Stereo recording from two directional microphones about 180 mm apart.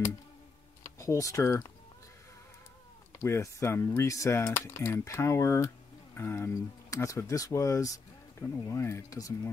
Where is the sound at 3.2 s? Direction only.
15° left (ahead or behind).